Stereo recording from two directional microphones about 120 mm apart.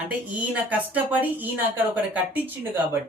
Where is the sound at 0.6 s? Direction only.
10° right (ahead or behind).